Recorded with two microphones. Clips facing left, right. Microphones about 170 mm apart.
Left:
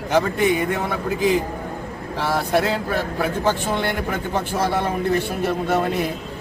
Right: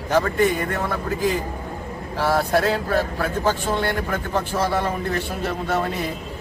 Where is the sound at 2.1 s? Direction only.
20° left (ahead or behind).